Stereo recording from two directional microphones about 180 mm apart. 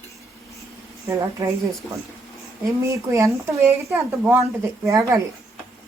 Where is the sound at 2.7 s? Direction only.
15° right (ahead or behind).